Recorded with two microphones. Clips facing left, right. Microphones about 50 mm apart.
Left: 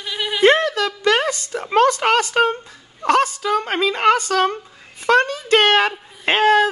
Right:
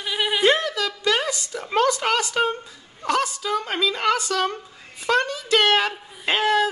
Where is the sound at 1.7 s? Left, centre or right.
Left.